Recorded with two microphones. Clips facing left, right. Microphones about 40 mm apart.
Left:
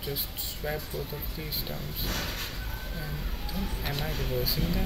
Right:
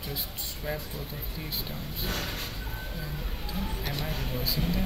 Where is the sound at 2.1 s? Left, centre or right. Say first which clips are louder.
Right 1 dB; right.